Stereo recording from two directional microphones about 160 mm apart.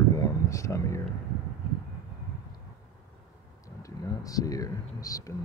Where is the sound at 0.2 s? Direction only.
20° left (ahead or behind).